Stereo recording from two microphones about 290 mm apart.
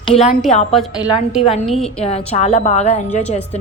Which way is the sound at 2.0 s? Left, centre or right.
Left.